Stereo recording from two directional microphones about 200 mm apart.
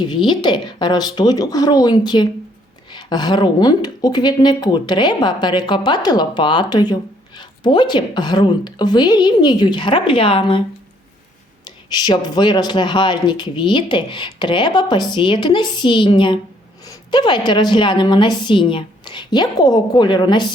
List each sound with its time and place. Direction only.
0.0 s speech: 25° left (ahead or behind)
11.6 s speech: 20° left (ahead or behind)